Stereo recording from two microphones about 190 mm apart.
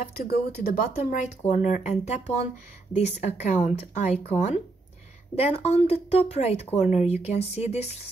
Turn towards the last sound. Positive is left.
turn(degrees=35)  # may be behind; listen again after turning